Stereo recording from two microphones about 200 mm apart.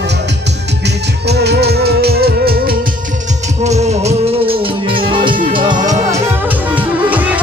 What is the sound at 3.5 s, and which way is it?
Music, 35° right (ahead or behind).